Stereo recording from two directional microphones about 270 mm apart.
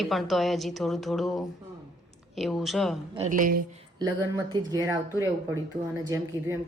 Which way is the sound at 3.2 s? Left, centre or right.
Right.